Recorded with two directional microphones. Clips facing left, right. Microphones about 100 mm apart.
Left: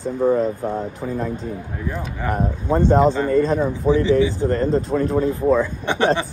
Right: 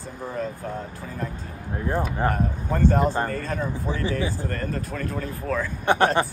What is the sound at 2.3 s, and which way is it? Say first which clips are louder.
Speech: left 6 dB; 20° left (ahead or behind).